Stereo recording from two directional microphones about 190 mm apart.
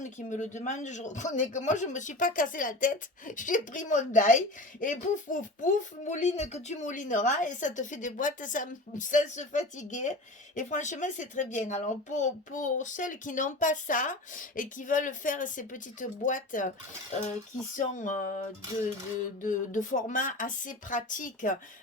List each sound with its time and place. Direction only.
0.0 s a man's voice: 40° left (ahead or behind)
17.7 s speech: 40° left (ahead or behind)